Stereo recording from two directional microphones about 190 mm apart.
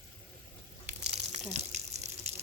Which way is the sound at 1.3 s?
35° right (ahead or behind).